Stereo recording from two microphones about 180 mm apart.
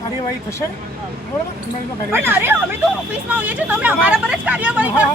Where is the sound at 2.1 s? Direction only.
10° right (ahead or behind).